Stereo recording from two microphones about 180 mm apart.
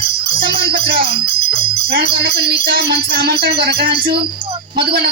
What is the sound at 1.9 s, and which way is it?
A woman's voice, 60° right (ahead or behind).